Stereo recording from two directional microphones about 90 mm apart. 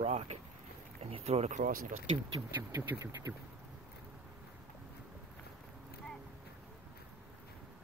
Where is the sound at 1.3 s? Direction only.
90° right.